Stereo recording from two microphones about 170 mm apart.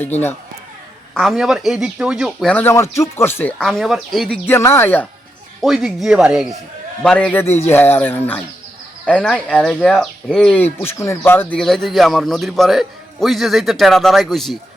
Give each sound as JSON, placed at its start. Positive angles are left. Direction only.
{"t": 0.0, "sound": "music", "side_deg": 10}
{"t": 1.1, "sound": "a man's voice", "side_deg": 0}
{"t": 2.6, "sound": "music", "side_deg": 15}
{"t": 3.6, "sound": "a man's voice", "side_deg": 0}
{"t": 4.4, "sound": "music", "side_deg": 15}
{"t": 5.6, "sound": "a man's voice", "side_deg": 0}
{"t": 7.7, "sound": "music", "side_deg": 10}
{"t": 9.0, "sound": "a man's voice", "side_deg": 5}
{"t": 10.8, "sound": "music", "side_deg": 15}
{"t": 11.3, "sound": "a man's voice", "side_deg": 10}